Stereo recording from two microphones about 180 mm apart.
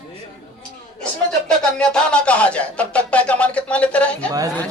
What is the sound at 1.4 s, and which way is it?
Music, 5° left (ahead or behind).